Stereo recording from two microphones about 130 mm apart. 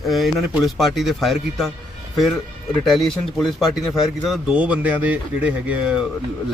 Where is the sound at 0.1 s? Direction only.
Centre (ahead or behind).